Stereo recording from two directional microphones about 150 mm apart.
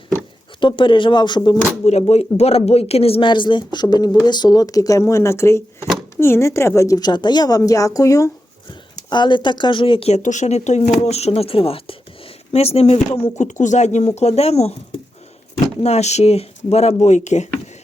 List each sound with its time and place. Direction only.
0.6 s speech: 35° left (ahead or behind)
1.8 s speech: 45° left (ahead or behind)
10.2 s speech: 50° left (ahead or behind)
15.8 s speech: 45° left (ahead or behind)